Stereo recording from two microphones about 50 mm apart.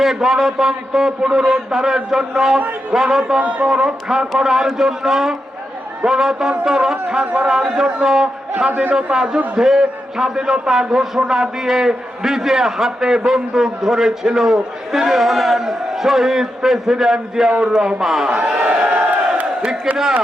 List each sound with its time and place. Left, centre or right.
0.0 s a man's voice: centre
18.3 s speech: centre
18.7 s crowd: right